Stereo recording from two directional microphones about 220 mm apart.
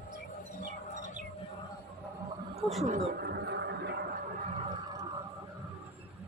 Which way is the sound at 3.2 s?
50° right (ahead or behind).